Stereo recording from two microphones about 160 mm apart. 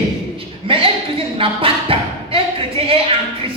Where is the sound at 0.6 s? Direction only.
35° right (ahead or behind).